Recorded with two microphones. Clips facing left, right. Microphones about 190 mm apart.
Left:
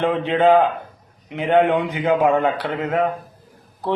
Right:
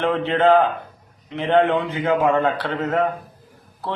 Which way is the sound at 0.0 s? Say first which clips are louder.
Left 1 dB; 15° left (ahead or behind).